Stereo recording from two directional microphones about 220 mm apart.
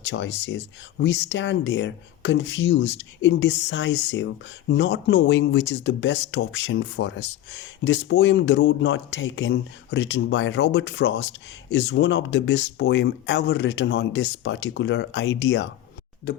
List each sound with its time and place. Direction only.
0.0 s speech: 55° left (ahead or behind)